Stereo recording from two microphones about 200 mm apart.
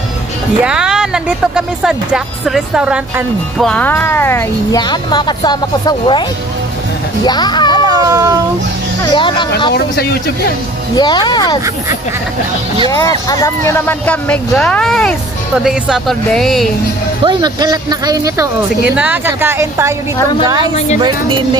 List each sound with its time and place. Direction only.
0.7 s speech: 5° right (ahead or behind); by 6.2 s 20° left (ahead or behind)
7.2 s speech: 20° left (ahead or behind)
7.8 s a sound: 20° right (ahead or behind)
9.1 s speech: 25° left (ahead or behind)
9.8 s speech: 50° left (ahead or behind)
11.0 s speech: 20° left (ahead or behind)
13.3 s speech: 15° left (ahead or behind)
17.2 s a woman's voice: 20° right (ahead or behind)